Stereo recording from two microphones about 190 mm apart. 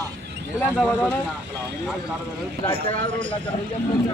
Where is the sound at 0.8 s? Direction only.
10° left (ahead or behind).